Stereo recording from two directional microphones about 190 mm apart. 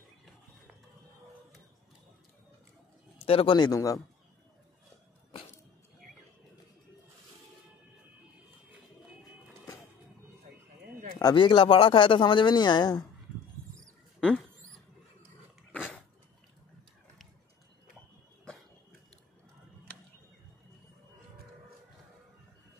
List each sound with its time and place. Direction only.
3.2 s speech: 30° left (ahead or behind)
11.1 s speech: 25° left (ahead or behind)
15.7 s dog: 10° left (ahead or behind)